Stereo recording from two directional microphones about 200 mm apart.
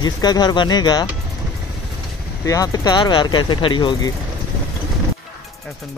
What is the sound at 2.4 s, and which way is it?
Speech, 15° left (ahead or behind).